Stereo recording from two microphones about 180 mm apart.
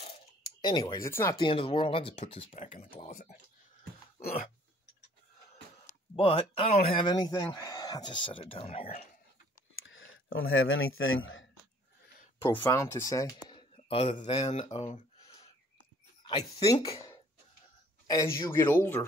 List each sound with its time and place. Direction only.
0.6 s a man's voice: 25° left (ahead or behind)
1.4 s speech: 30° left (ahead or behind)
4.2 s throat clearing: 55° left (ahead or behind)
5.9 s a man's voice: 35° left (ahead or behind)
9.8 s speech: 90° left
12.4 s speech: 15° left (ahead or behind); by 15.4 s 35° left (ahead or behind)
16.2 s a sound: 30° left (ahead or behind)
18.0 s speech: 20° left (ahead or behind)